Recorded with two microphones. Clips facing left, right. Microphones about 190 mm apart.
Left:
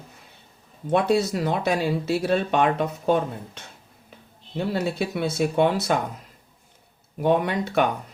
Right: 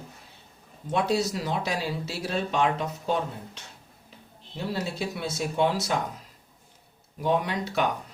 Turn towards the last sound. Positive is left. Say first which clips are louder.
# left 5 dB
turn(degrees=55)  # may be behind; listen again after turning